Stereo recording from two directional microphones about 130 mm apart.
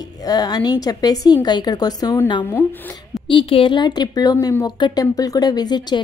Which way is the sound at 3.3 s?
40° left (ahead or behind).